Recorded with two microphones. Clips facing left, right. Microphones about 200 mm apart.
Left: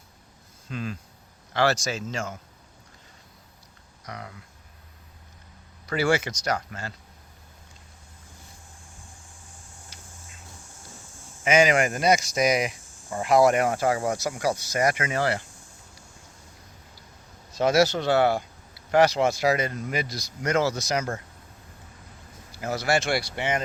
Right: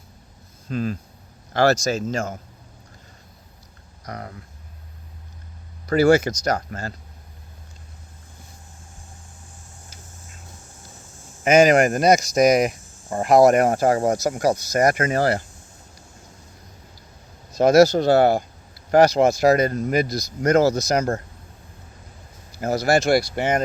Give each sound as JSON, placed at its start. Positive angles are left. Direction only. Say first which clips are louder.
{"t": 0.7, "sound": "speech", "louder": "right 8 dB", "side_deg": -40}
{"t": 4.0, "sound": "speech", "louder": "right 5 dB", "side_deg": -45}
{"t": 5.8, "sound": "speech", "louder": "right 8 dB", "side_deg": -40}
{"t": 11.4, "sound": "speech", "louder": "right 6 dB", "side_deg": -45}
{"t": 17.5, "sound": "speech", "louder": "right 7 dB", "side_deg": -40}
{"t": 22.6, "sound": "speech", "louder": "right 6 dB", "side_deg": -40}